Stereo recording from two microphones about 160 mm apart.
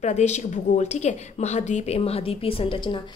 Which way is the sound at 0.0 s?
45° left (ahead or behind).